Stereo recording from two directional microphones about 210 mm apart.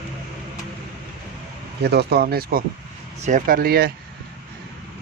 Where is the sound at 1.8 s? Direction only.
50° right (ahead or behind).